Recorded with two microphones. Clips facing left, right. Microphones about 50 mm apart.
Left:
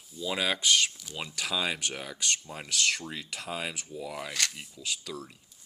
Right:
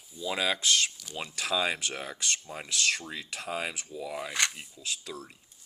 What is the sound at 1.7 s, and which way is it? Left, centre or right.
Speech, right.